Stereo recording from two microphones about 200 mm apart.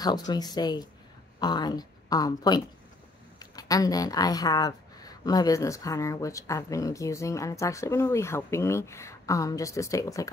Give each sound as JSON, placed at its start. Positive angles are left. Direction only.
{"t": 0.0, "sound": "speech", "side_deg": 20}